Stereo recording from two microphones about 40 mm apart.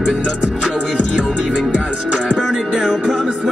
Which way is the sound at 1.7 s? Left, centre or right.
Right.